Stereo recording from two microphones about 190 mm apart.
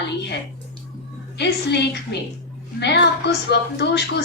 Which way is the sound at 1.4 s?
60° left (ahead or behind).